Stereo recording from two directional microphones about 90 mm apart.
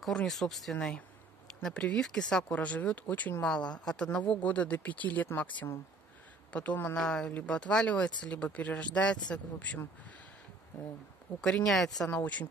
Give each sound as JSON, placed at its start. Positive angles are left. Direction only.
{"t": 0.0, "sound": "speech", "side_deg": 5}
{"t": 0.7, "sound": "speech", "side_deg": 15}
{"t": 7.0, "sound": "speech", "side_deg": 5}
{"t": 11.4, "sound": "speech", "side_deg": 10}
{"t": 12.1, "sound": "speech", "side_deg": 15}